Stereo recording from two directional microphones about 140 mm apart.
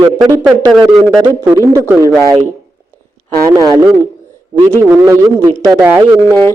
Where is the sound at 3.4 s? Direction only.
25° right (ahead or behind).